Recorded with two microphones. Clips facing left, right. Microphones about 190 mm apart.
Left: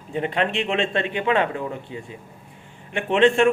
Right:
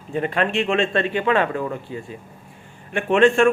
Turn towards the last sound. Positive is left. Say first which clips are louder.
# right 2 dB
turn(degrees=20)  # may be behind; listen again after turning